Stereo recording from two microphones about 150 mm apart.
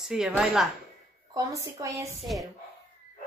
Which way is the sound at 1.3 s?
20° right (ahead or behind).